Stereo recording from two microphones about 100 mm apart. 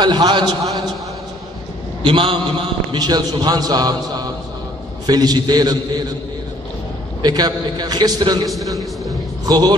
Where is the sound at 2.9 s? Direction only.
45° right (ahead or behind).